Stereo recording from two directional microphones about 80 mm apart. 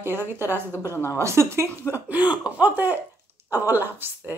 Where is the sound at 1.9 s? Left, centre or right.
Centre.